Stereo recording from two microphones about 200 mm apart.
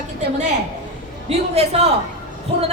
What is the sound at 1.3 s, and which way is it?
Speech, 30° right (ahead or behind).